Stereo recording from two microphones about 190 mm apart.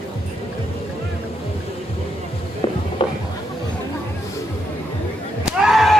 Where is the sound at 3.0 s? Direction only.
25° left (ahead or behind).